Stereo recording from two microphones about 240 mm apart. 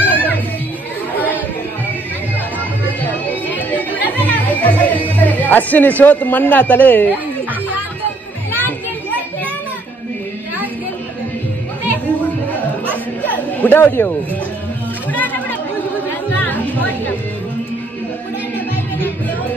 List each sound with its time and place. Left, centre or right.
0.0 s children playing: centre
4.4 s music: centre
13.2 s chatter: centre
15.1 s chatter: centre
16.3 s music: centre